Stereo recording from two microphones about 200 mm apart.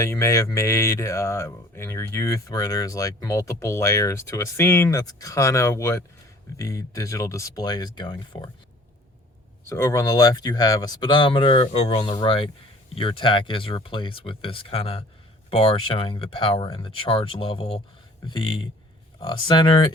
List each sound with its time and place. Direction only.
0.0 s speech: 15° left (ahead or behind)
9.6 s speech: 15° left (ahead or behind)